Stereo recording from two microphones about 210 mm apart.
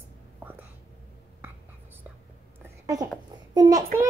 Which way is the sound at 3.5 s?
15° right (ahead or behind).